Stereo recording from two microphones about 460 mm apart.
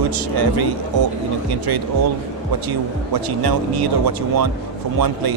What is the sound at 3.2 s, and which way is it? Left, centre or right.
Speech, right.